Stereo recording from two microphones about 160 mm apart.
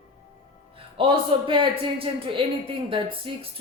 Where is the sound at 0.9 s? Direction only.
30° right (ahead or behind).